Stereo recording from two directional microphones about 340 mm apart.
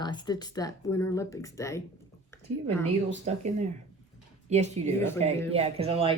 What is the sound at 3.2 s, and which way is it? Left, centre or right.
Speech, centre.